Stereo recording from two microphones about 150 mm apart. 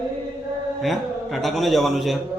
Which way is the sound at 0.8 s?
Centre (ahead or behind).